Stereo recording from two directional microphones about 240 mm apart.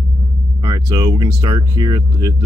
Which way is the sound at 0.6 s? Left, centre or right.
Centre.